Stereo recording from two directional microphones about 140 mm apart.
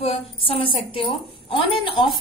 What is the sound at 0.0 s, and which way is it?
A woman's voice, 40° left (ahead or behind).